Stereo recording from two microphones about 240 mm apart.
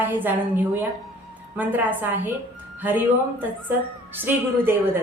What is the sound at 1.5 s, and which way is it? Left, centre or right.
Speech, centre.